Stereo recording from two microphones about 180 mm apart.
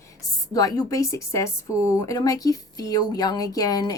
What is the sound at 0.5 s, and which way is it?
Speech, 20° left (ahead or behind).